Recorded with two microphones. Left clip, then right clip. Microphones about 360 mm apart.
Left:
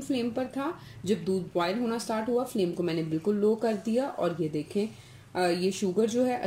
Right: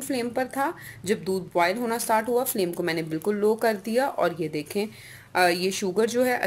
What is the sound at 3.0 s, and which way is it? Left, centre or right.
Speech, right.